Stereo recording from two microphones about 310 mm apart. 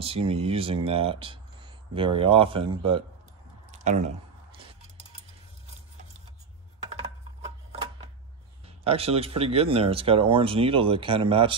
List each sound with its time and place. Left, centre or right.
0.0 s speech: centre
3.7 s squish: right
8.8 s speech: centre